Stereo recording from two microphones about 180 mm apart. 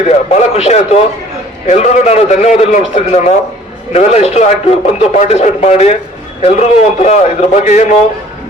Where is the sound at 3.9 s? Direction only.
35° left (ahead or behind).